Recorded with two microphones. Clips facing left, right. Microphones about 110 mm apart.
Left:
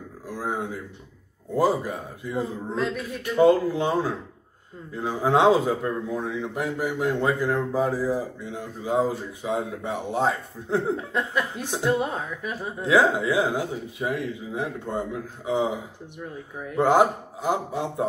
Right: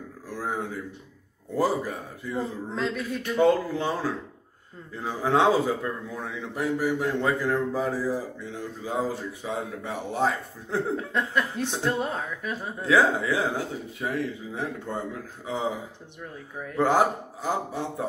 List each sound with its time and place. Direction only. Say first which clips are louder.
0.4 s speech: left 1 dB; 15° left (ahead or behind)
2.7 s speech: left 1 dB; 5° left (ahead or behind)
3.4 s speech: left 4 dB; 15° left (ahead or behind)
5.2 s speech: left 3 dB; 20° left (ahead or behind)
11.0 s speech: even; 5° left (ahead or behind)
12.8 s speech: left 2 dB; 20° left (ahead or behind)
16.7 s speech: left 3 dB; 20° left (ahead or behind)